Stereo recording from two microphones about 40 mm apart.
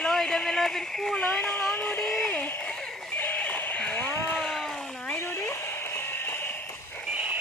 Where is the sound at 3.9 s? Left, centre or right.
Left.